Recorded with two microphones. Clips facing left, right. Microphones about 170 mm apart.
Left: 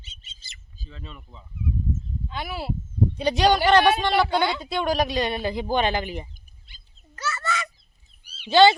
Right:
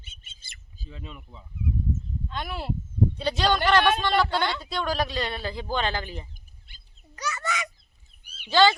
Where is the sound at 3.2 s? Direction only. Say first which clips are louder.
Left 6 dB; 15° left (ahead or behind).